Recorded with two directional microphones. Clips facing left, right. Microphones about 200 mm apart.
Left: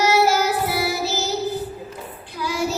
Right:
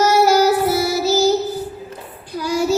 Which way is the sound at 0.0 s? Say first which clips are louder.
Right 5 dB; 40° right (ahead or behind).